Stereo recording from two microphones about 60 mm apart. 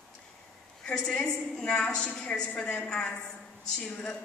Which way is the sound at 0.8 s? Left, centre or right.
Centre.